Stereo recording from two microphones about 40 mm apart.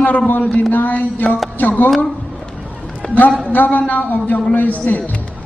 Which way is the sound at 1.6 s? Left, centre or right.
Left.